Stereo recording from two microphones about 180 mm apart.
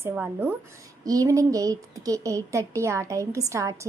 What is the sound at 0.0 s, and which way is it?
A woman's voice, 10° right (ahead or behind).